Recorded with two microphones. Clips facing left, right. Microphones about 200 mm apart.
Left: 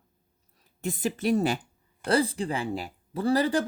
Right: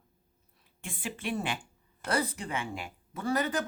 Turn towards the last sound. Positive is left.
turn(degrees=30)  # may be behind; listen again after turning